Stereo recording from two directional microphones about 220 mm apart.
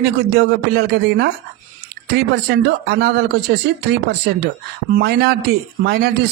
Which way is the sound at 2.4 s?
50° right (ahead or behind).